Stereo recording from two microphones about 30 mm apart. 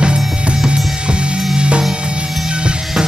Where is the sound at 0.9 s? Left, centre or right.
Right.